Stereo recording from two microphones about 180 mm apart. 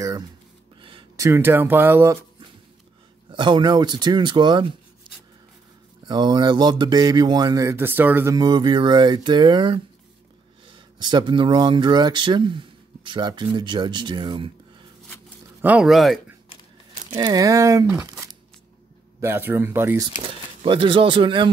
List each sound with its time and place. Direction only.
0.7 s a sound: 30° right (ahead or behind)
1.2 s speech: 15° right (ahead or behind)
3.3 s speech: 25° right (ahead or behind)
6.0 s speech: 20° right (ahead or behind)
15.6 s speech: 5° right (ahead or behind)
17.1 s speech: 20° right (ahead or behind)
20.2 s speech: 30° right (ahead or behind)